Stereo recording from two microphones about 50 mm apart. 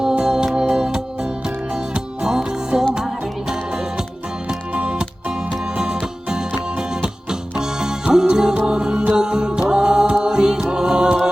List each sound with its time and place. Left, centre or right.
0.0 s music: centre
4.4 s music: right